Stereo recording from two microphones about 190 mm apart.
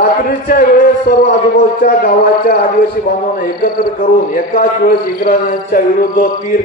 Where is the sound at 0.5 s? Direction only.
50° left (ahead or behind).